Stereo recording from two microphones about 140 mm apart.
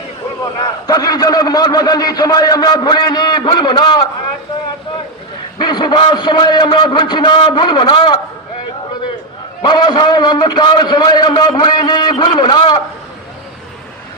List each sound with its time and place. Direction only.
0.6 s a man's voice: 25° left (ahead or behind)
5.5 s a man's voice: 30° left (ahead or behind)
9.6 s a man's voice: 30° left (ahead or behind)